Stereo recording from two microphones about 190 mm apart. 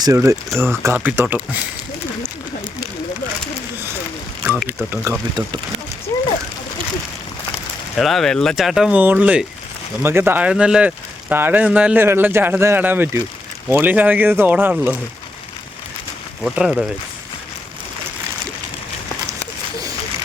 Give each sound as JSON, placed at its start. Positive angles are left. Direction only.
{"t": 0.0, "sound": "speech", "side_deg": -15}
{"t": 4.4, "sound": "speech", "side_deg": -5}
{"t": 7.9, "sound": "speech", "side_deg": 0}
{"t": 16.4, "sound": "speech", "side_deg": -5}